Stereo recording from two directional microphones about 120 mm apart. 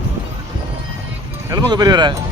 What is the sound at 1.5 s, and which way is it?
Speech, 35° right (ahead or behind).